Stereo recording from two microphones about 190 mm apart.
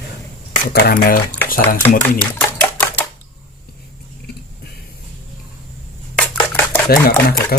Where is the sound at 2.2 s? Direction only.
10° left (ahead or behind).